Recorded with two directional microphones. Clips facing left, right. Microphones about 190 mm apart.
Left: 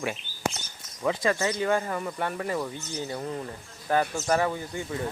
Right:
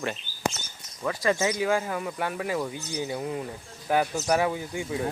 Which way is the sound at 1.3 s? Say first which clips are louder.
Right 5 dB; 20° right (ahead or behind).